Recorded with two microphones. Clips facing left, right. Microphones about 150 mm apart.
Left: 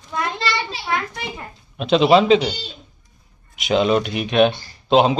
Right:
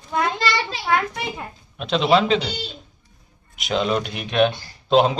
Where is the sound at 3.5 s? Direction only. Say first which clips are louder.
Left 5 dB; centre (ahead or behind).